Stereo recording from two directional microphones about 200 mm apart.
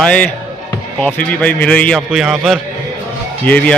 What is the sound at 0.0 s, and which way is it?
A man's voice, 5° left (ahead or behind).